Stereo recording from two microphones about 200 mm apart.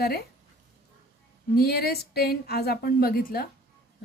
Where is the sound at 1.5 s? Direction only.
50° left (ahead or behind).